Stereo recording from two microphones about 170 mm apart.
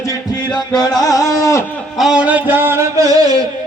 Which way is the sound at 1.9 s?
5° right (ahead or behind).